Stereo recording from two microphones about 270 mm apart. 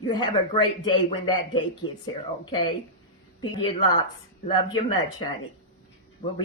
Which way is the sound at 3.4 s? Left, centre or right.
Centre.